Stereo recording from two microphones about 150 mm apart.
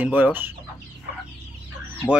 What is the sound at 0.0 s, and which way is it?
Speech, 10° right (ahead or behind).